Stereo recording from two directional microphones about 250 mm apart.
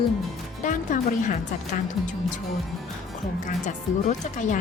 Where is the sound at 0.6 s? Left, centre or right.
Left.